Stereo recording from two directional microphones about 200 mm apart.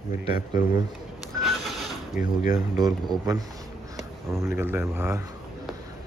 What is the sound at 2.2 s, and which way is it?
Speech, 40° left (ahead or behind).